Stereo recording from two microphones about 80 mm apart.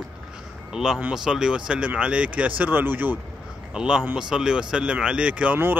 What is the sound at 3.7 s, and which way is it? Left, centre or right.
A man's voice, centre.